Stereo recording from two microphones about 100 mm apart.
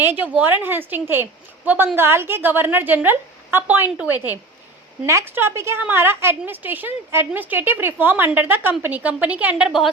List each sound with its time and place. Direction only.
0.0 s a woman's voice: 20° right (ahead or behind)